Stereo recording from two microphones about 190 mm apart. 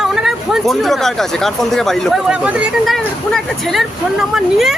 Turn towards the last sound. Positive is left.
turn(degrees=0)  # may be behind; listen again after turning